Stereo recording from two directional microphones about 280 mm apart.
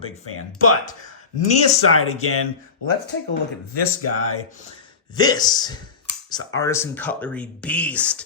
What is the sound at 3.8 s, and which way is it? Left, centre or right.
Speech, left.